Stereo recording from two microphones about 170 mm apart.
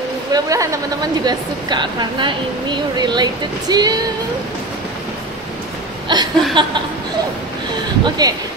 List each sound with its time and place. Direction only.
0.3 s a woman's voice: 20° right (ahead or behind)
6.1 s speech: 25° right (ahead or behind)
8.0 s speech: 20° right (ahead or behind)